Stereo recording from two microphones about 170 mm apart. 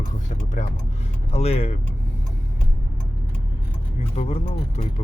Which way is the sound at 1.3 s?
40° left (ahead or behind).